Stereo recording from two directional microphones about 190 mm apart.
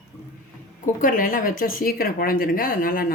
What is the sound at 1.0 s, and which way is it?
Speech, 45° left (ahead or behind).